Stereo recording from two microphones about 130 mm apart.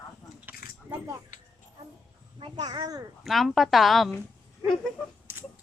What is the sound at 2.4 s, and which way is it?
Speech, 35° right (ahead or behind).